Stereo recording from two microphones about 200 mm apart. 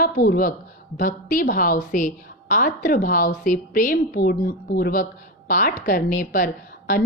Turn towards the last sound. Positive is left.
turn(degrees=40)  # may be behind; listen again after turning